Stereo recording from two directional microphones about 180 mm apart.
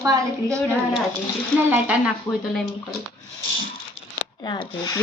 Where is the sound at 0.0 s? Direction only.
15° right (ahead or behind).